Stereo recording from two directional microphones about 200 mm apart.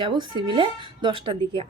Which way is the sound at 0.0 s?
25° right (ahead or behind).